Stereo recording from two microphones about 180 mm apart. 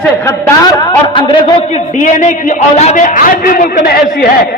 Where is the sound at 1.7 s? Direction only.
40° left (ahead or behind).